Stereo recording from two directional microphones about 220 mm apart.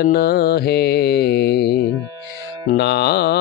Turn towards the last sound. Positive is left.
turn(degrees=50)  # may be behind; listen again after turning